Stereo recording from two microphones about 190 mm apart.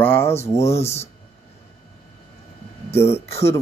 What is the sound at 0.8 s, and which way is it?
Speech, 35° left (ahead or behind).